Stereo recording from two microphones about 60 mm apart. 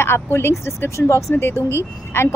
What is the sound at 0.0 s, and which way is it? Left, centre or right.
A woman's voice, left.